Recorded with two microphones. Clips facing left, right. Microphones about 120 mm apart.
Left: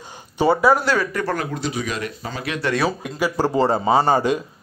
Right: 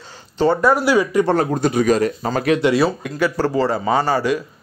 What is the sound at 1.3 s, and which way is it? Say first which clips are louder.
Speech: right 7 dB; 40° right (ahead or behind).